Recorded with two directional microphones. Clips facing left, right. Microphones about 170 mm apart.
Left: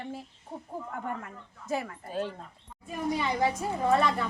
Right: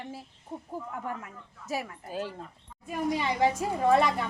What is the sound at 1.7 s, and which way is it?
Speech, 5° right (ahead or behind).